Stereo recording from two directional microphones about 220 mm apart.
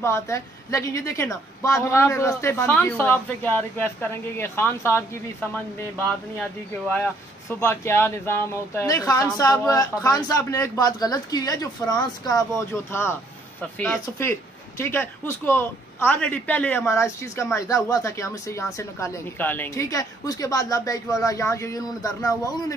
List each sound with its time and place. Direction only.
0.0 s a man's voice: 15° left (ahead or behind)
7.4 s a man's voice: 10° left (ahead or behind)